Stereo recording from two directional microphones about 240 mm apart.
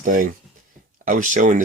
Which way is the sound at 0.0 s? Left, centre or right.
Right.